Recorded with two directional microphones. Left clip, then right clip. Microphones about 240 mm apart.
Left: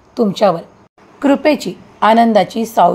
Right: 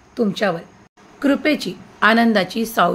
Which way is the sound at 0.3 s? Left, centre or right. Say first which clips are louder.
Left 8 dB; centre.